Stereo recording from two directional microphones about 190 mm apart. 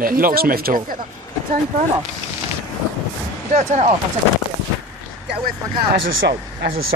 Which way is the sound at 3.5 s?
35° right (ahead or behind).